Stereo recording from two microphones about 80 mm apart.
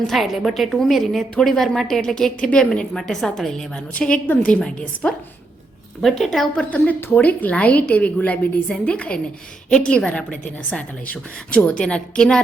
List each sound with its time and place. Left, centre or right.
0.1 s a woman's voice: centre
6.0 s a woman's voice: centre
6.6 s a woman's voice: centre